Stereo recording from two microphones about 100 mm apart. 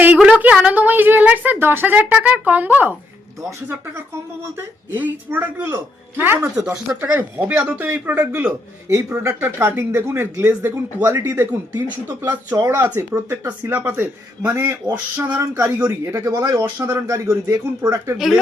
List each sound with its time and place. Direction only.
0.2 s a sound: 15° right (ahead or behind)
0.5 s speech: 15° right (ahead or behind)
4.9 s speech: 20° right (ahead or behind)
8.9 s speech: 30° right (ahead or behind)
16.0 s speech: 35° right (ahead or behind)
16.6 s speech: 25° right (ahead or behind)